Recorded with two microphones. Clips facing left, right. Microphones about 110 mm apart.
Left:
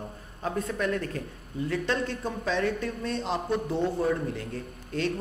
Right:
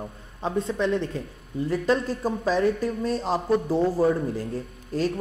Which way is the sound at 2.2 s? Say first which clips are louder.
Right 5 dB; 35° right (ahead or behind).